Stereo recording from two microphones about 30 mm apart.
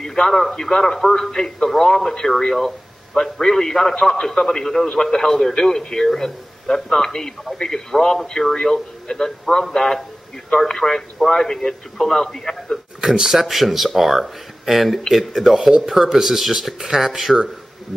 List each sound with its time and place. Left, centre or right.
0.0 s a man's voice: centre
13.0 s speech: right